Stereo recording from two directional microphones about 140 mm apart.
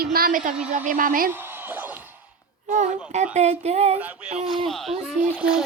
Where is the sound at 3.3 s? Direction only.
55° right (ahead or behind).